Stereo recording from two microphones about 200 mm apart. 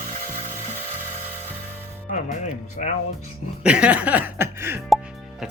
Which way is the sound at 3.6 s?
5° right (ahead or behind).